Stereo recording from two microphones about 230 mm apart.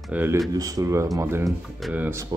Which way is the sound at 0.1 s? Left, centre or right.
Centre.